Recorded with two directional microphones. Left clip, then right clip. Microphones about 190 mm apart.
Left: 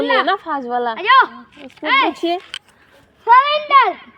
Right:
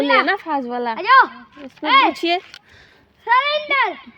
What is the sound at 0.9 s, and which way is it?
Speech, 30° right (ahead or behind).